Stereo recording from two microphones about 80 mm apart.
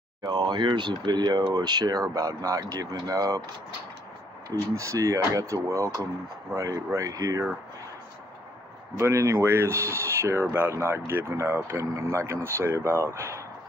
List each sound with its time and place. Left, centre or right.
0.2 s speech: right
4.7 s speech: right
8.9 s speech: right
11.8 s speech: right